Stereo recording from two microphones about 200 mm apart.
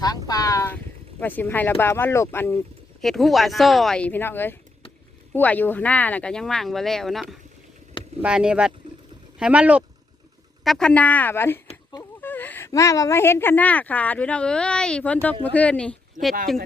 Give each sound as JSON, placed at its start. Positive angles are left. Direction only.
{"t": 0.0, "sound": "speech", "side_deg": 20}
{"t": 3.0, "sound": "speech", "side_deg": 0}
{"t": 11.7, "sound": "a sound", "side_deg": 20}
{"t": 12.2, "sound": "speech", "side_deg": 10}
{"t": 16.2, "sound": "speech", "side_deg": -40}